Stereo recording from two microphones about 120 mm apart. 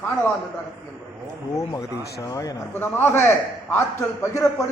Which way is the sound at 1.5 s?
30° left (ahead or behind).